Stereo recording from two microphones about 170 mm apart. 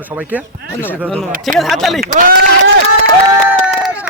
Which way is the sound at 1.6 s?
Centre (ahead or behind).